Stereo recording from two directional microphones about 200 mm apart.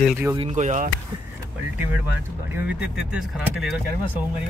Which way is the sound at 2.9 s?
Centre (ahead or behind).